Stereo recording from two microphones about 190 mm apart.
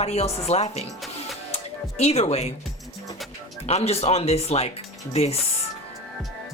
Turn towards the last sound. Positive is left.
turn(degrees=35)  # may be behind; listen again after turning